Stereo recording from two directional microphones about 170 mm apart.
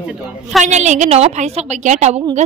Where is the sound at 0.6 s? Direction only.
45° right (ahead or behind).